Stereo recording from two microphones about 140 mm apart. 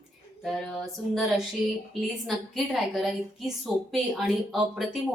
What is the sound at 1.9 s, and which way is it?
A woman's voice, centre (ahead or behind).